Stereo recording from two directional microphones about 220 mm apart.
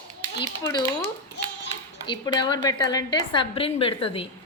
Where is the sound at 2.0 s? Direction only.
20° left (ahead or behind).